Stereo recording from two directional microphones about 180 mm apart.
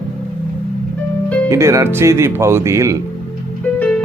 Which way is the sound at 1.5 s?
15° right (ahead or behind).